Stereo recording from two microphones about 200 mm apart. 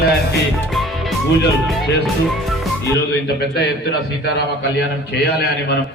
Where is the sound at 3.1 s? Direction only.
55° left (ahead or behind).